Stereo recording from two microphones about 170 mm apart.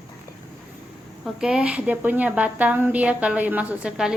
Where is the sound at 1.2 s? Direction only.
5° right (ahead or behind).